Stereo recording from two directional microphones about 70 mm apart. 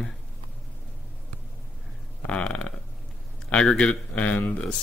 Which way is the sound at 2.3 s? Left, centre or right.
Centre.